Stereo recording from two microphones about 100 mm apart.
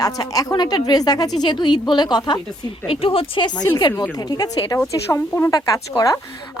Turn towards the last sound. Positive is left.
turn(degrees=35)  # may be behind; listen again after turning